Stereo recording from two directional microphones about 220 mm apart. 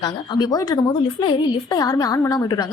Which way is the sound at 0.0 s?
15° left (ahead or behind).